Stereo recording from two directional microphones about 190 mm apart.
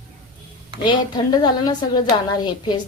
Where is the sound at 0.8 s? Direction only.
20° left (ahead or behind).